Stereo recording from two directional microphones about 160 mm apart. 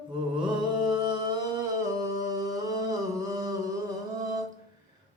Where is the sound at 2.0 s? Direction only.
20° right (ahead or behind).